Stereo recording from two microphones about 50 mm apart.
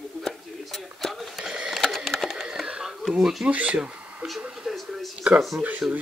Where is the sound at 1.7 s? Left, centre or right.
Centre.